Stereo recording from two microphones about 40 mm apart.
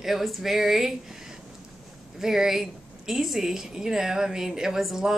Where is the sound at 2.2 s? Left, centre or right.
Centre.